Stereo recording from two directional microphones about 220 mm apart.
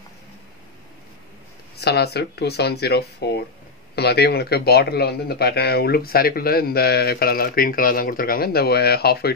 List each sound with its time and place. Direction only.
1.8 s speech: 50° left (ahead or behind)